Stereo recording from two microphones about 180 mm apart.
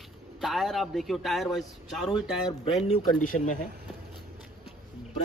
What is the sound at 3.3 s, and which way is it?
Speech, 45° left (ahead or behind).